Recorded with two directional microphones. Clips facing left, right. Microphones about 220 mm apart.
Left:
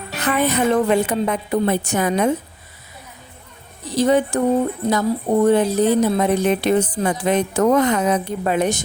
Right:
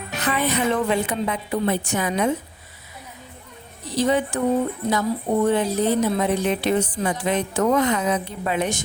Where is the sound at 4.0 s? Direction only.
40° left (ahead or behind).